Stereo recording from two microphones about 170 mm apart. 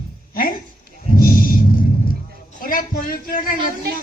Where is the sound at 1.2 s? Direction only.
55° left (ahead or behind).